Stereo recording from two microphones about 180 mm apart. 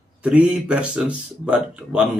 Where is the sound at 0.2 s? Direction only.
5° right (ahead or behind).